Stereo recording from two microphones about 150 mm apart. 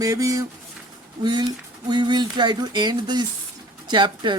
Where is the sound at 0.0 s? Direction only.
20° right (ahead or behind).